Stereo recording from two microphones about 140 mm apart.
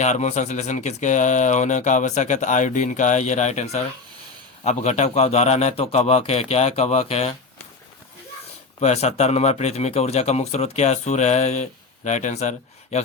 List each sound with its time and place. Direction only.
0.0 s speech: 55° left (ahead or behind)
8.8 s speech: 50° left (ahead or behind)